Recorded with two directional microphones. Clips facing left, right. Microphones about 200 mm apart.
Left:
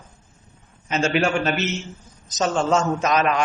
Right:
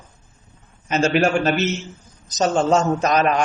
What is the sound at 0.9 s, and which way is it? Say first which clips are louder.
A man's voice: right 3 dB; 40° right (ahead or behind).